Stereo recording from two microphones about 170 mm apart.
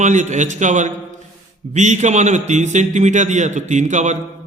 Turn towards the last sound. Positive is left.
turn(degrees=-45)  # may be behind; listen again after turning